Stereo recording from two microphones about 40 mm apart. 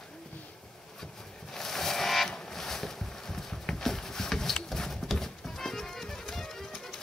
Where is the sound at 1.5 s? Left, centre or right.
Centre.